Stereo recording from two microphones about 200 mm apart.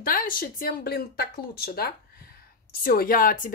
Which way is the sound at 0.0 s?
45° left (ahead or behind).